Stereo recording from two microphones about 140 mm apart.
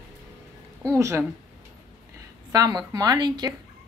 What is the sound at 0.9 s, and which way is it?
Speech, 20° right (ahead or behind).